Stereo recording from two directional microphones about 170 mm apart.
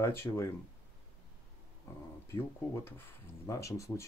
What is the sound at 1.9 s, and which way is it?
Speech, 15° left (ahead or behind).